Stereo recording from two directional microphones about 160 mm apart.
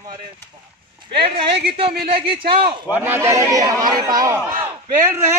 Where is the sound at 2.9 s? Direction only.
15° right (ahead or behind).